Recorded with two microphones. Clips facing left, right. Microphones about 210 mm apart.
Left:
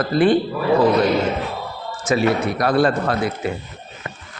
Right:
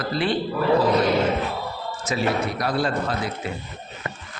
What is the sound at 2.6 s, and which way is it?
Speech, 65° left (ahead or behind).